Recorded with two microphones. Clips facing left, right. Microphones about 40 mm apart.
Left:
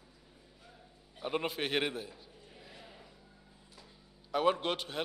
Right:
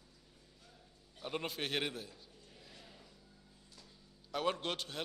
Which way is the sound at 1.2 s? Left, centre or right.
Centre.